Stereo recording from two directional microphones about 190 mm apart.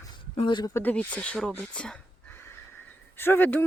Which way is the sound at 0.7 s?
10° left (ahead or behind).